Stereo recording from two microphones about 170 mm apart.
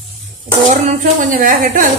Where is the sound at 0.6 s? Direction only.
50° right (ahead or behind).